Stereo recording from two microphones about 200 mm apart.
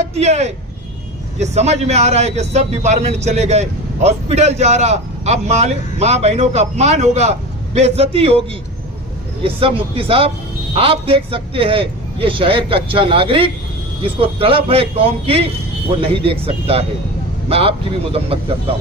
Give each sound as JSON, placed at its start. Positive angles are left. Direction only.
{"t": 0.0, "sound": "a man's voice", "side_deg": -35}